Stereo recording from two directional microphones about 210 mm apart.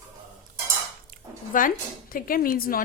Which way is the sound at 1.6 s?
40° left (ahead or behind).